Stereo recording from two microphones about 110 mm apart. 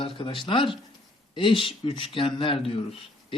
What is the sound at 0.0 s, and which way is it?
Speech, 50° left (ahead or behind).